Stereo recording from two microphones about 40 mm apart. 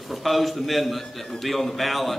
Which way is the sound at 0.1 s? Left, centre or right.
Centre.